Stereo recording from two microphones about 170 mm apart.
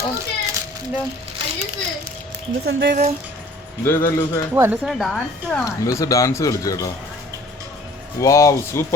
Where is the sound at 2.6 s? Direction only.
70° right (ahead or behind).